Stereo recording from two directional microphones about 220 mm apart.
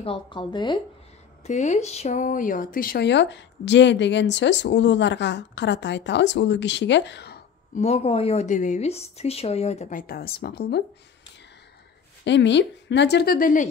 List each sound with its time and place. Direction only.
0.0 s speech: 25° left (ahead or behind); by 7.3 s 50° left (ahead or behind)
7.7 s speech: 30° left (ahead or behind); by 10.8 s 45° left (ahead or behind)
12.3 s speech: 55° left (ahead or behind); by 13.7 s 40° left (ahead or behind)